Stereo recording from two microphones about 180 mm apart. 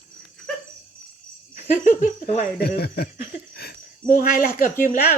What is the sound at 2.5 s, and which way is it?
Speech, 60° left (ahead or behind).